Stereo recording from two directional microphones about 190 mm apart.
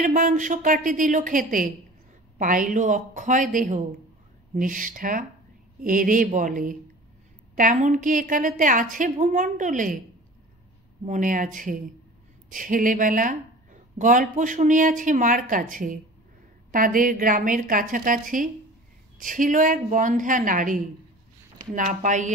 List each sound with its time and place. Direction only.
0.0 s a woman's voice: 45° right (ahead or behind)
11.1 s a woman's voice: 45° right (ahead or behind)